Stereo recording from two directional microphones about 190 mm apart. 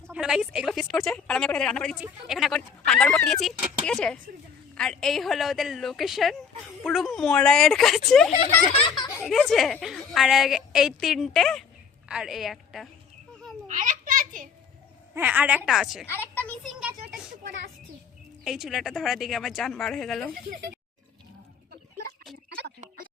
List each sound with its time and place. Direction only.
0.1 s a woman's voice: 5° right (ahead or behind)
8.7 s speech: 30° left (ahead or behind)
9.1 s a woman's voice: centre (ahead or behind)
13.7 s a sound: 45° right (ahead or behind)
15.1 s a woman's voice: 10° right (ahead or behind)
16.0 s speech: 10° left (ahead or behind)
18.4 s a woman's voice: centre (ahead or behind)
20.5 s speech: 50° right (ahead or behind)